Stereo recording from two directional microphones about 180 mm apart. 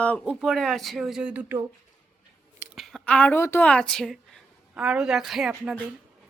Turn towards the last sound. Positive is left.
turn(degrees=0)  # may be behind; listen again after turning